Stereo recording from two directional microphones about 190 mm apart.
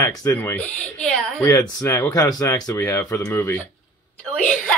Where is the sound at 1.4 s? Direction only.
15° left (ahead or behind).